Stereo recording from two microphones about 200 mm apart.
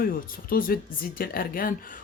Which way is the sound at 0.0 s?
45° left (ahead or behind).